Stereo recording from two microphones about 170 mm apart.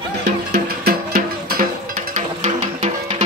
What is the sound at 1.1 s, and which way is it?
Music, 55° right (ahead or behind).